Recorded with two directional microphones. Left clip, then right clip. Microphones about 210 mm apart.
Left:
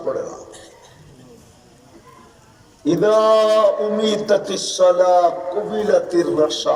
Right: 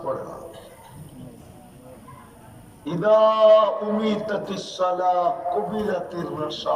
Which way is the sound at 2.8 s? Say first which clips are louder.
Left 3 dB; 25° left (ahead or behind).